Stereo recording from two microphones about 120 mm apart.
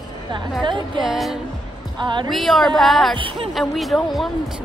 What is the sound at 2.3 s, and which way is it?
Speech, centre (ahead or behind).